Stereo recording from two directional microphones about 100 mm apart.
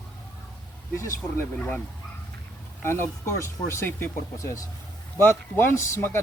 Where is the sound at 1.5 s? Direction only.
15° left (ahead or behind).